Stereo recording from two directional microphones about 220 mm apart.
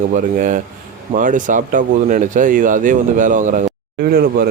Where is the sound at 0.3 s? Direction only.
35° right (ahead or behind).